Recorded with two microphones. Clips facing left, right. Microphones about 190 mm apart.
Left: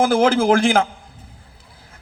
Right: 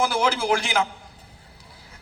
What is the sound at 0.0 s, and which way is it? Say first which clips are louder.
Speech: left 8 dB; 50° left (ahead or behind).